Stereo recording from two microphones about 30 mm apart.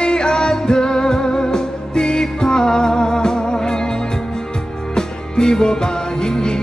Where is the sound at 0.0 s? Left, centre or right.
Left.